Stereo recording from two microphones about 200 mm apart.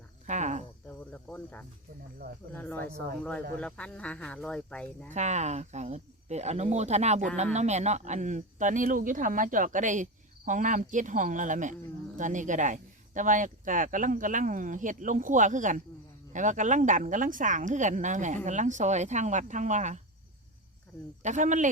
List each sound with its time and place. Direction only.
0.3 s speech: 35° right (ahead or behind)
0.9 s cricket: 10° left (ahead or behind)
2.5 s speech: 10° left (ahead or behind)
5.1 s speech: 35° right (ahead or behind)
21.2 s speech: 40° right (ahead or behind)